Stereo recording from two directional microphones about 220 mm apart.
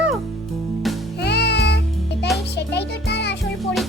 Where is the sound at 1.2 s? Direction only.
50° left (ahead or behind).